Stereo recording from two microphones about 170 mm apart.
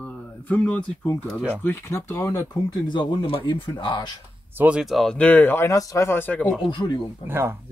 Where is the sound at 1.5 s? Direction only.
10° left (ahead or behind).